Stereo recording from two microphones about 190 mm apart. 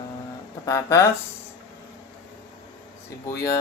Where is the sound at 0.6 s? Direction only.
15° left (ahead or behind).